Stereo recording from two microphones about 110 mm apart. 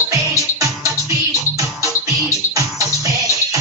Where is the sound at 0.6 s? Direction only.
30° right (ahead or behind).